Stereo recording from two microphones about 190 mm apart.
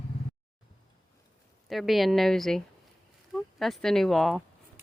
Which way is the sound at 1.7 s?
Centre (ahead or behind).